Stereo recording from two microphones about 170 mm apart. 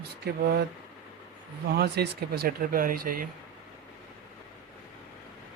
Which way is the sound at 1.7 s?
70° right (ahead or behind).